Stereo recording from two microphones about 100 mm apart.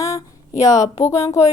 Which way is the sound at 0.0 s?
35° left (ahead or behind).